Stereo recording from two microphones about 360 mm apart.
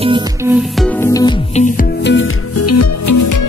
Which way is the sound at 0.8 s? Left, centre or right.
Centre.